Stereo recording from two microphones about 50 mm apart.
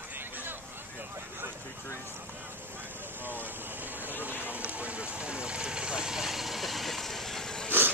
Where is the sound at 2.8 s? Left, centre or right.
Right.